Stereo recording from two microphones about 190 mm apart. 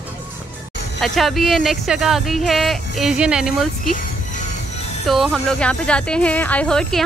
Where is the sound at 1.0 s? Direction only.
Centre (ahead or behind).